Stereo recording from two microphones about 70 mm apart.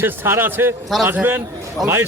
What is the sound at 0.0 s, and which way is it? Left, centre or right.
A man's voice, right.